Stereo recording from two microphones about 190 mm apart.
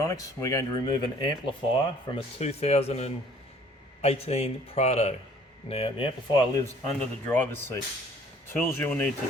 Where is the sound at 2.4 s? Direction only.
35° left (ahead or behind).